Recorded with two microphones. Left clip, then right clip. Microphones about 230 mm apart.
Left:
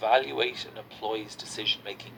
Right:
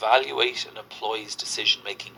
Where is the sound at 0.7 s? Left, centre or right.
Right.